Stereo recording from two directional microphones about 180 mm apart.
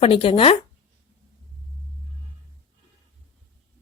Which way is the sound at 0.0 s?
30° left (ahead or behind).